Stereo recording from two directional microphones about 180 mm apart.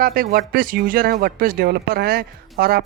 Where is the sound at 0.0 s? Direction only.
55° right (ahead or behind).